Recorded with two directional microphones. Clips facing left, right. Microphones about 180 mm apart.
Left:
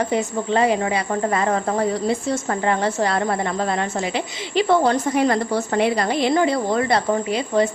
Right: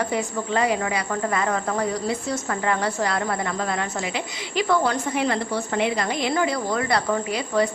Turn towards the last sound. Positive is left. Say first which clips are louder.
# left 3 dB
turn(degrees=25)  # may be behind; listen again after turning